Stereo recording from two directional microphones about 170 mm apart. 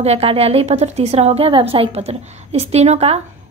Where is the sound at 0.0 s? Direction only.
35° right (ahead or behind).